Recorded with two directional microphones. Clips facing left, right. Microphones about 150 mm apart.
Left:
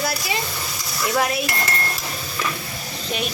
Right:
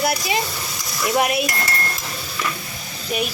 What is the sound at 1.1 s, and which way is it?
Cutlery, 15° right (ahead or behind).